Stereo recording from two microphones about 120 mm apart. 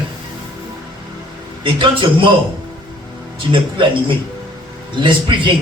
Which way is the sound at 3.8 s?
45° right (ahead or behind).